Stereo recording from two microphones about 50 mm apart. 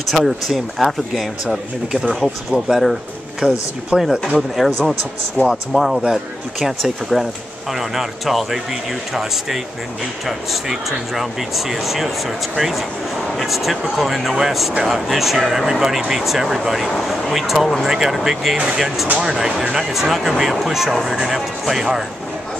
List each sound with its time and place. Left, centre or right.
0.1 s speech: centre
5.4 s speech: left
5.7 s speech: centre